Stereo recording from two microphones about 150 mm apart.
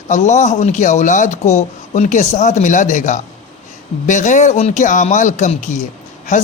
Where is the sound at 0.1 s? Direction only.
50° left (ahead or behind).